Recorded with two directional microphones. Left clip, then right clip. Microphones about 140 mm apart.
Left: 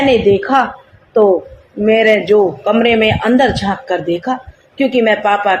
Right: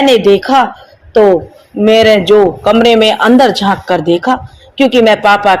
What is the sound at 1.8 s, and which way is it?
A man's voice, 45° right (ahead or behind).